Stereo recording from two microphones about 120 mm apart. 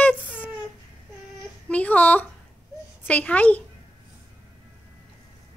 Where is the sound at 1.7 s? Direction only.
10° left (ahead or behind).